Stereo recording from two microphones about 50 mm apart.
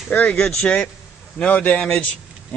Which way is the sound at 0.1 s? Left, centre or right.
Left.